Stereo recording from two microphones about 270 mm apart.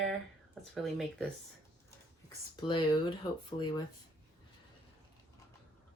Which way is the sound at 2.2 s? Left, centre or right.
Centre.